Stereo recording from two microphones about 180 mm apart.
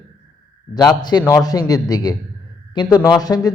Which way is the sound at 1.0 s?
25° left (ahead or behind).